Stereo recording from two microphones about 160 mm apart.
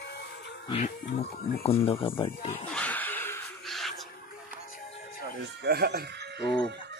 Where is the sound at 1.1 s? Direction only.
75° left (ahead or behind).